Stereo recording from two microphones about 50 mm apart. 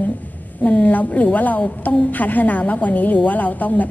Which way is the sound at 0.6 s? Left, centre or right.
Left.